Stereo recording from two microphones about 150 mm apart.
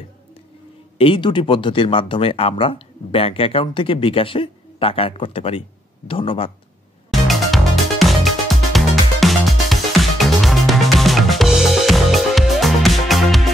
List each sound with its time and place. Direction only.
0.9 s speech: 35° left (ahead or behind)
7.1 s music: centre (ahead or behind)